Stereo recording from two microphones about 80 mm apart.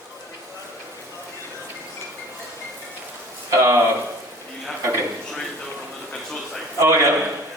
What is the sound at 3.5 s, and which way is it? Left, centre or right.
Speech, right.